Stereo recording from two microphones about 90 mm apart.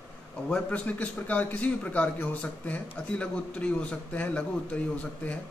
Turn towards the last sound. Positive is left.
turn(degrees=15)  # may be behind; listen again after turning